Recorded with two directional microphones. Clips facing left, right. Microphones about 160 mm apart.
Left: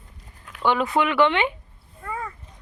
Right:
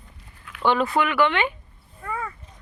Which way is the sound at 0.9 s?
25° left (ahead or behind).